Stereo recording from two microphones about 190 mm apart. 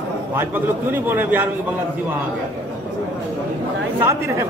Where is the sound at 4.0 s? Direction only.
15° right (ahead or behind).